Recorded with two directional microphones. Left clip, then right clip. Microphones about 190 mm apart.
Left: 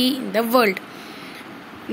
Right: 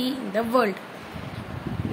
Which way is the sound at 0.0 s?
15° left (ahead or behind).